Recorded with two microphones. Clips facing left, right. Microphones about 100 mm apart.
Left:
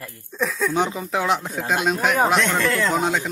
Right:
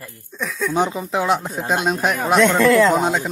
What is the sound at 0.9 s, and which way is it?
Speech, 25° right (ahead or behind).